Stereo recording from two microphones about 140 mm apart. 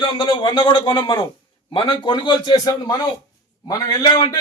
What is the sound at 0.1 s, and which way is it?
A man's voice, 35° left (ahead or behind).